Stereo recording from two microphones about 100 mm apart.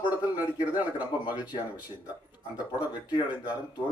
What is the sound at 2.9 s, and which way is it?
Speech, 45° left (ahead or behind).